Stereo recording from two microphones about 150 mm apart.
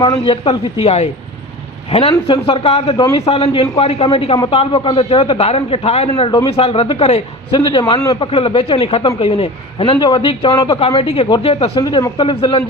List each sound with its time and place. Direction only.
0.0 s a man's voice: 35° left (ahead or behind)
7.5 s a man's voice: 30° left (ahead or behind)
11.8 s a man's voice: 30° left (ahead or behind)